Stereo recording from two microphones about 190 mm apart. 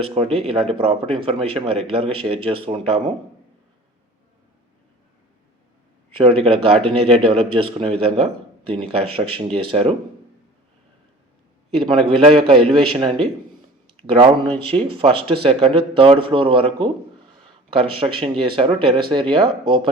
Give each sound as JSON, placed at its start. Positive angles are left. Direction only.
{"t": 0.0, "sound": "a man's voice", "side_deg": -30}
{"t": 6.4, "sound": "a man's voice", "side_deg": -30}
{"t": 11.8, "sound": "a man's voice", "side_deg": -30}